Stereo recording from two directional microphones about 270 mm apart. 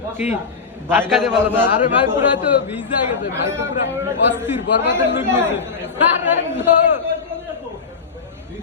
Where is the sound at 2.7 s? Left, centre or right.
Centre.